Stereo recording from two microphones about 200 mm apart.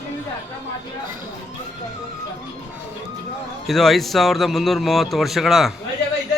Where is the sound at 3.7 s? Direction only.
Centre (ahead or behind).